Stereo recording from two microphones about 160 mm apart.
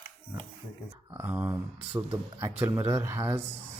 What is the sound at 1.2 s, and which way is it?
Speech, 10° right (ahead or behind).